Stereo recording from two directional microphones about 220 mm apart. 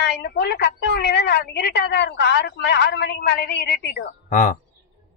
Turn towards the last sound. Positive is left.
turn(degrees=35)  # may be behind; listen again after turning